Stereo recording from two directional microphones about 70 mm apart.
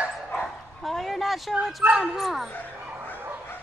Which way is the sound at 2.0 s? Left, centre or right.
Centre.